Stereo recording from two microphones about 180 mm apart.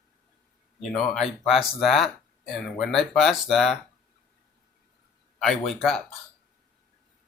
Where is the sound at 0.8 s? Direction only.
Centre (ahead or behind).